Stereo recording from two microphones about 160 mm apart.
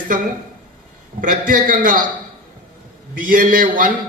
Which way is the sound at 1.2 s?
60° right (ahead or behind).